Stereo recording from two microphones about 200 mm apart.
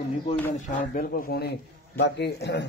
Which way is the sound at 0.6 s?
45° left (ahead or behind).